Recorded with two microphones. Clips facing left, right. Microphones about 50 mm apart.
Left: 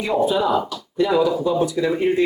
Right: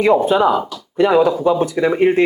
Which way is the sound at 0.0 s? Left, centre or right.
Right.